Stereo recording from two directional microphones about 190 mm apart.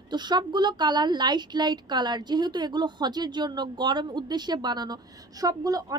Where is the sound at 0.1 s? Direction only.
20° right (ahead or behind).